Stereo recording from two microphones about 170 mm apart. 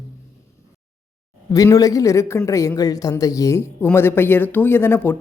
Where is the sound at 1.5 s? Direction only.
20° left (ahead or behind).